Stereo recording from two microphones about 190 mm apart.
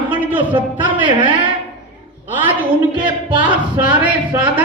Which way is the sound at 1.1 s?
25° right (ahead or behind).